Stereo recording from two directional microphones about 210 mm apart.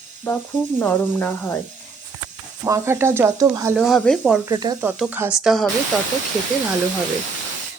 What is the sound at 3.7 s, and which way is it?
Speech, centre (ahead or behind).